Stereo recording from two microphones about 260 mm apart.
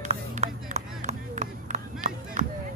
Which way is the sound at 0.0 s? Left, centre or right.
Right.